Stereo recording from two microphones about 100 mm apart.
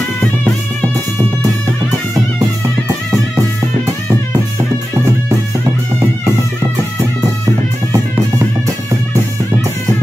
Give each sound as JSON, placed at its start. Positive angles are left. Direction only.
{"t": 3.1, "sound": "music", "side_deg": -35}